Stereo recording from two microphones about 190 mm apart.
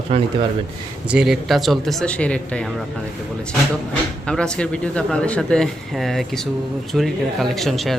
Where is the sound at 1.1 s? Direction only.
Centre (ahead or behind).